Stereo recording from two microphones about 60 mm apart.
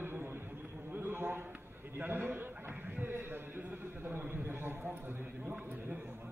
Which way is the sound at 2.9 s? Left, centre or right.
Right.